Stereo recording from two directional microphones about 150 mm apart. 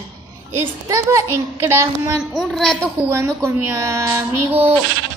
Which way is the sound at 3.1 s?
20° right (ahead or behind).